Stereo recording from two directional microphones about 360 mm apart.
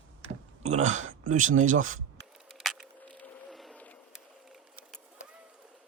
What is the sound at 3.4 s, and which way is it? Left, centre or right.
Vehicle, centre.